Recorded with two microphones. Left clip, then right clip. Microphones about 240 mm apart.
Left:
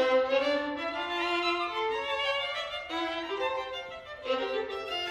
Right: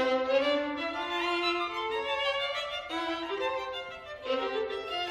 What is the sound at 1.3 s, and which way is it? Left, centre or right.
Violin, left.